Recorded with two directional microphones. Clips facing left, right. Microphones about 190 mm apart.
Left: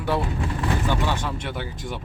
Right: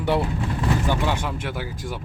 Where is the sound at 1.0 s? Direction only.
10° right (ahead or behind).